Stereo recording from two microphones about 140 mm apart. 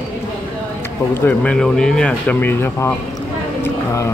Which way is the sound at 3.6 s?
20° left (ahead or behind).